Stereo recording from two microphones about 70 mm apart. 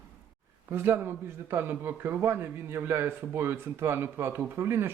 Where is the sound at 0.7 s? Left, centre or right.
Right.